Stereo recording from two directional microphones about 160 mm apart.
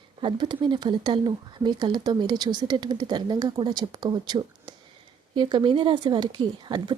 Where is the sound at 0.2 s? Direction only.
30° right (ahead or behind).